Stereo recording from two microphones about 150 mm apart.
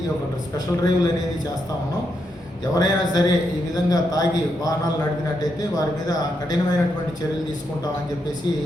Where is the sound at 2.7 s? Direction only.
25° left (ahead or behind).